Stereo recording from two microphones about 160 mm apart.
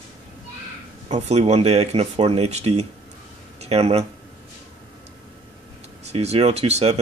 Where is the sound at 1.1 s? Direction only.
45° right (ahead or behind).